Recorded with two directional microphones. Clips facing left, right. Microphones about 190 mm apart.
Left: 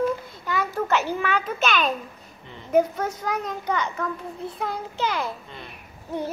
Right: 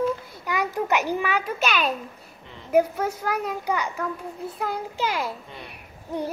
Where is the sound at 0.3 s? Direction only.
15° right (ahead or behind).